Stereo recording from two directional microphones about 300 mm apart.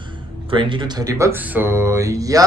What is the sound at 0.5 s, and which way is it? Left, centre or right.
A man's voice, centre.